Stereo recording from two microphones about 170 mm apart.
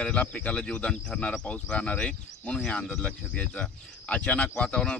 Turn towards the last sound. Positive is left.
turn(degrees=5)  # may be behind; listen again after turning